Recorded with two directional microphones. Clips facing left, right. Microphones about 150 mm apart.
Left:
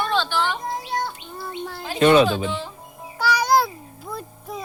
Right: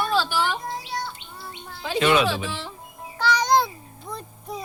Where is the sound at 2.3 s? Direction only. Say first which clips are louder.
Left 3 dB; 80° right.